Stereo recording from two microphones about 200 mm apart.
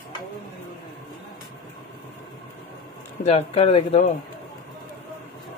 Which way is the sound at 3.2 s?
30° left (ahead or behind).